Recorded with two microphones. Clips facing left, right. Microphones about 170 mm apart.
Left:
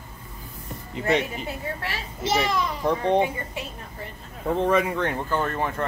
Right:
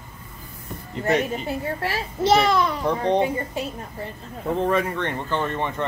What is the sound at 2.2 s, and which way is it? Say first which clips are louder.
Speech: right 6 dB; 65° right (ahead or behind).